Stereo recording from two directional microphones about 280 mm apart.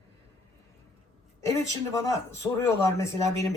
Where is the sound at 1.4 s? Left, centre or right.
Centre.